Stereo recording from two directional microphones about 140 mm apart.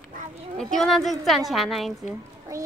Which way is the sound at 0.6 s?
Centre (ahead or behind).